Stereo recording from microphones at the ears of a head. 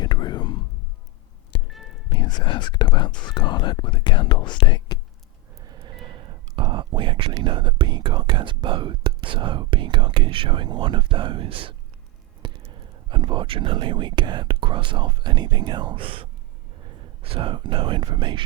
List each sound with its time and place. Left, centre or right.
0.0 s whispering: left
2.0 s speech: left
5.6 s speech: right